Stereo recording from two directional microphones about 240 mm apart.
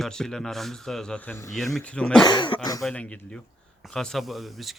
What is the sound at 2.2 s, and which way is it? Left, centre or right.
Speech, centre.